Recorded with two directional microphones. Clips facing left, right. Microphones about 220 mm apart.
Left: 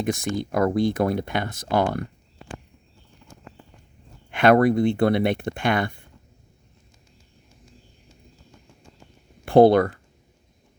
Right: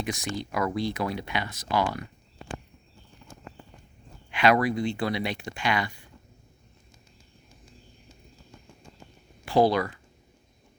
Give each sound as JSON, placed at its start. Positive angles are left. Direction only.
{"t": 0.0, "sound": "speech", "side_deg": 50}
{"t": 4.3, "sound": "speech", "side_deg": 55}
{"t": 9.4, "sound": "speech", "side_deg": 55}